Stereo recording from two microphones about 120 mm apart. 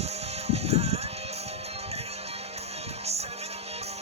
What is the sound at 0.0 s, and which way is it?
Music, 60° right (ahead or behind).